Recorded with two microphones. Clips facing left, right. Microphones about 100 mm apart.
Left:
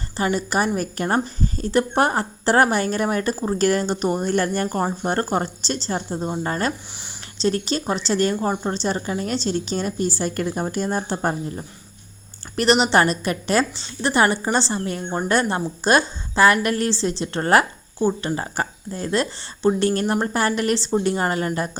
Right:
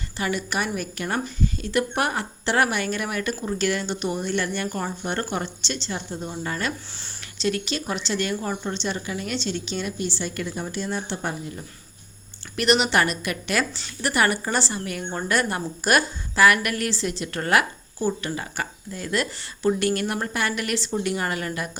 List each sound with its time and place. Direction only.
0.2 s a woman's voice: 35° left (ahead or behind)